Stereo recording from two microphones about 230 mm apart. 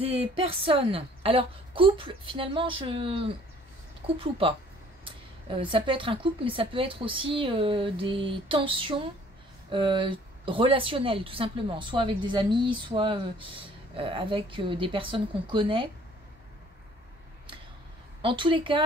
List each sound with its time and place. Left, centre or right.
0.0 s a woman's voice: right
18.2 s a woman's voice: right